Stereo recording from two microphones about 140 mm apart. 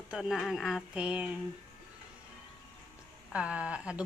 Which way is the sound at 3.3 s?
10° right (ahead or behind).